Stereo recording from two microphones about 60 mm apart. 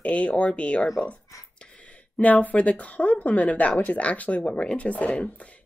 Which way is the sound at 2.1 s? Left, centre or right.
Left.